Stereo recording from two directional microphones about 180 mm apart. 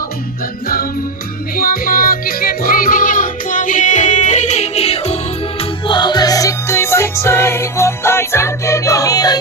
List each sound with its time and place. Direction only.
1.5 s music: 55° left (ahead or behind); by 9.4 s 20° left (ahead or behind)